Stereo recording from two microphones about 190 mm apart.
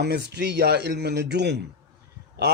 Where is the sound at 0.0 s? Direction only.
60° right (ahead or behind).